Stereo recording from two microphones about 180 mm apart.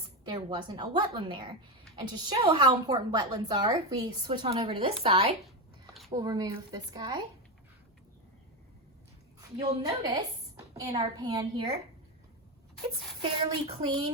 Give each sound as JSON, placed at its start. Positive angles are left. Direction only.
{"t": 0.3, "sound": "a woman's voice", "side_deg": -25}
{"t": 6.1, "sound": "a woman's voice", "side_deg": -20}
{"t": 9.6, "sound": "a woman's voice", "side_deg": -25}
{"t": 13.5, "sound": "a woman's voice", "side_deg": -25}